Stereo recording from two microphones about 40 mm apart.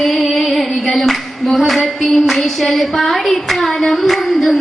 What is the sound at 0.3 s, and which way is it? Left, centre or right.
Female singing, centre.